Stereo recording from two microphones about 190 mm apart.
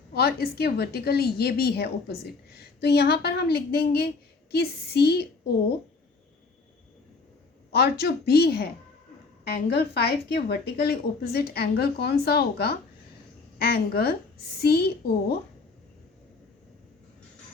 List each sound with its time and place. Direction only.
0.1 s a woman's voice: 55° left (ahead or behind)
7.7 s a woman's voice: 55° left (ahead or behind)